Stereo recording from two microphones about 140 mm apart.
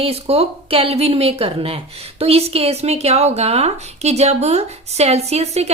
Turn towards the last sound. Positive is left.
turn(degrees=-50)  # may be behind; listen again after turning